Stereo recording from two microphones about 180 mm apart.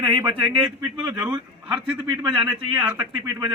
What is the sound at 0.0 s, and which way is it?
Speech, 30° right (ahead or behind).